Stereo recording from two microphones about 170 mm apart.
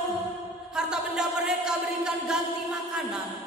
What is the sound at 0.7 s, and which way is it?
A woman's voice, 5° right (ahead or behind).